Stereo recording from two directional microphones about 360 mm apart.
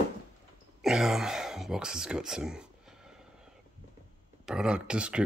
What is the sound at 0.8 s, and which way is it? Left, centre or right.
Speech, centre.